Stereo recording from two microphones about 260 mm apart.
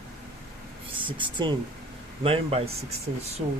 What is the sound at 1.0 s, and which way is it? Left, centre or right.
Speech, centre.